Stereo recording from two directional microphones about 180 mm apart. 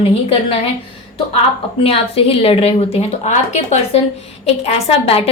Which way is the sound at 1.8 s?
35° left (ahead or behind).